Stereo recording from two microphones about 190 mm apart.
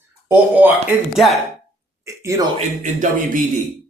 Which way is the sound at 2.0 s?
15° right (ahead or behind).